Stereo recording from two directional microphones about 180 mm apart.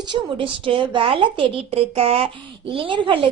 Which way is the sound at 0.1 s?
30° right (ahead or behind).